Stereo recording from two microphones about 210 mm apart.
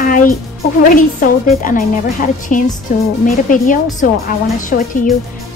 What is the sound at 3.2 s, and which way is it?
A woman's voice, 40° left (ahead or behind).